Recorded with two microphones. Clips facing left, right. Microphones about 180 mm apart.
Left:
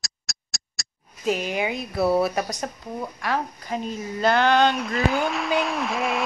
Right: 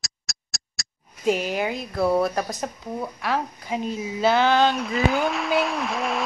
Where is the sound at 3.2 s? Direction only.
10° right (ahead or behind).